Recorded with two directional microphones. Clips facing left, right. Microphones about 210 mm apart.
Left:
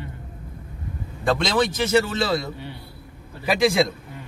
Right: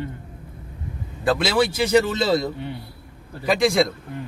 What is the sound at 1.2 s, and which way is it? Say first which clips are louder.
A man's voice: right 1 dB; 5° right (ahead or behind).